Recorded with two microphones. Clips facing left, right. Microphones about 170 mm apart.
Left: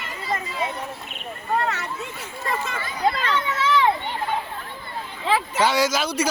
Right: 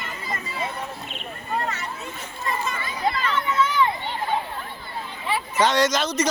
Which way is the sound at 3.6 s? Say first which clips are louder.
Left 2 dB; 90° left.